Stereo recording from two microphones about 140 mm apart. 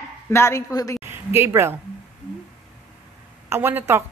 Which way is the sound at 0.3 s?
20° left (ahead or behind).